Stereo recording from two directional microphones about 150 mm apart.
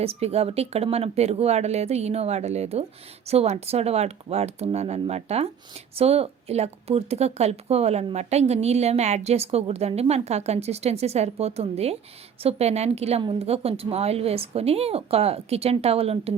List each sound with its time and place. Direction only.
0.0 s a woman's voice: 40° right (ahead or behind)